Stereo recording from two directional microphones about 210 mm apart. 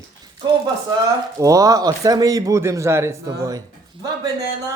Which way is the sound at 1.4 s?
15° right (ahead or behind).